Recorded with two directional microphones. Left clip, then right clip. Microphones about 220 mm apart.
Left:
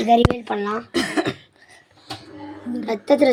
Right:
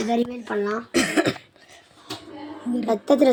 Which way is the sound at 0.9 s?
Centre (ahead or behind).